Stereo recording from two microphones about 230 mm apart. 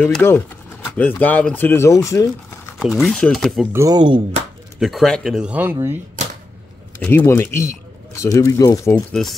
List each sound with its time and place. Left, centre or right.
0.0 s speech: centre
2.8 s speech: centre
3.7 s speech: centre
4.7 s speech: centre
7.0 s speech: centre
8.9 s speech: centre